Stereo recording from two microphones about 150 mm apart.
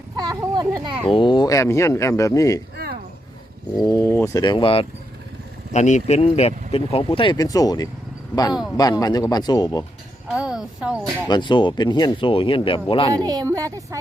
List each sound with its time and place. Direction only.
0.2 s a sound: 25° right (ahead or behind)
1.1 s speech: 35° left (ahead or behind)
2.7 s a sound: 90° right
3.8 s speech: 20° left (ahead or behind); by 4.9 s 35° left (ahead or behind)
5.7 s speech: 50° left (ahead or behind); by 9.8 s 25° left (ahead or behind)
10.3 s speech: 5° right (ahead or behind)
11.3 s speech: 30° left (ahead or behind)
13.1 s speech: 25° right (ahead or behind)